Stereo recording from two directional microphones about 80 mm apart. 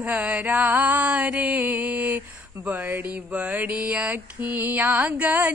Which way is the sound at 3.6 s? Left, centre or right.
Centre.